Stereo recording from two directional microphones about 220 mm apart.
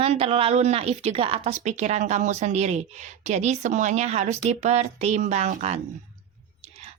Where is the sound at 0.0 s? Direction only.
25° right (ahead or behind).